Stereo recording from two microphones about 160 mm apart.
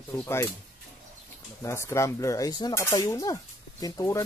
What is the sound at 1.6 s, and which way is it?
Speech, 15° left (ahead or behind).